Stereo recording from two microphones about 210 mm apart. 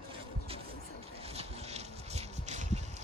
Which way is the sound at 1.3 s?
30° right (ahead or behind).